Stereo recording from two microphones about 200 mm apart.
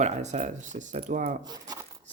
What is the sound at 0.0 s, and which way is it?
Speech, 35° right (ahead or behind).